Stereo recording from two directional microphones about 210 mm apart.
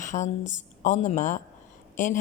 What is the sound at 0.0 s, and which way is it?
Speech, 35° left (ahead or behind).